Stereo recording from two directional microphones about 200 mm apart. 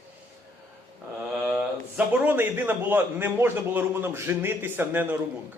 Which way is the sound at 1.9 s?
10° right (ahead or behind).